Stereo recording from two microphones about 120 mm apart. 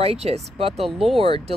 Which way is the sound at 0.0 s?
60° right (ahead or behind).